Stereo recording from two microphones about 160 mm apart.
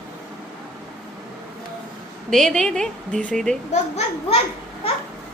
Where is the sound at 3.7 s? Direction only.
45° left (ahead or behind).